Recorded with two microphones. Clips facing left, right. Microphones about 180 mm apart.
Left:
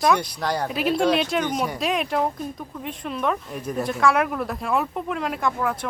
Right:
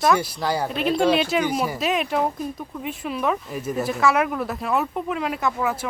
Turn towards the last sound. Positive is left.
turn(degrees=-5)  # may be behind; listen again after turning